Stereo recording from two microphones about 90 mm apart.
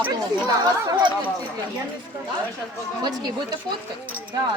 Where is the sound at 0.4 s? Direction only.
50° right (ahead or behind).